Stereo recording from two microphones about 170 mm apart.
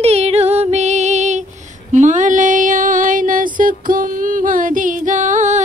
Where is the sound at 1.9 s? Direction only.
45° right (ahead or behind).